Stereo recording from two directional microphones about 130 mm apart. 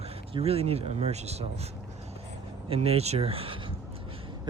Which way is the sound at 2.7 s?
50° right (ahead or behind).